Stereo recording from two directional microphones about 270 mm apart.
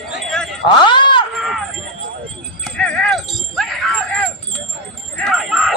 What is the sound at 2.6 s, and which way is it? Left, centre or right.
Jingle bell, centre.